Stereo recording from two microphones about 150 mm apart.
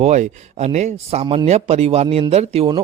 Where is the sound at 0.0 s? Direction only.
50° right (ahead or behind).